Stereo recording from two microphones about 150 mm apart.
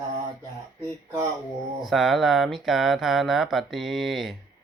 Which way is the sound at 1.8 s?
Centre (ahead or behind).